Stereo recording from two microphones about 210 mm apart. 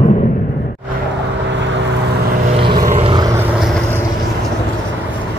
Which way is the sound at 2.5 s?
25° right (ahead or behind).